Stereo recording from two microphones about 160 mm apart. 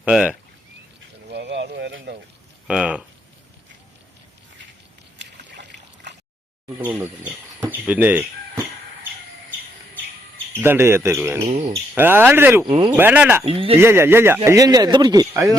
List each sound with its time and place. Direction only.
0.0 s speech: 10° right (ahead or behind)
1.3 s a sound: 90° right
2.6 s speech: 5° right (ahead or behind)
5.1 s boat: 90° right
6.7 s speech: 10° right (ahead or behind)
7.6 s a sound: 10° right (ahead or behind)
10.5 s speech: 15° right (ahead or behind)
12.7 s speech: 30° right (ahead or behind)
13.0 s speech: 10° right (ahead or behind)
13.4 s speech: 35° right (ahead or behind)
13.7 s speech: 15° right (ahead or behind)